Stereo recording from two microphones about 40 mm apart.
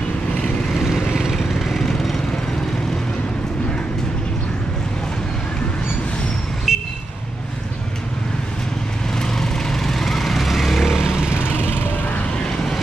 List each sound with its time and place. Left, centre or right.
1.1 s vehicle: centre
1.6 s vehicle: centre
6.7 s vehicle: centre
9.3 s vehicle: centre
11.3 s music: left
12.4 s vehicle: centre